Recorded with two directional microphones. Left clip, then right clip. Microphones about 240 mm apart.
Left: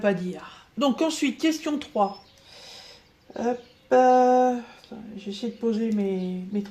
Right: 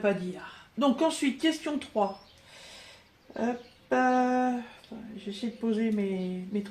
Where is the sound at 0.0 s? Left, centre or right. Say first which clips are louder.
Left 3 dB; left.